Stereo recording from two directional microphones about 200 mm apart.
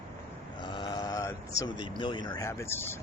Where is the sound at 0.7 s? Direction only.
20° left (ahead or behind).